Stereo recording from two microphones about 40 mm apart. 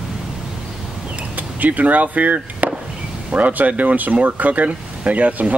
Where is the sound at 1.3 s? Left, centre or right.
Right.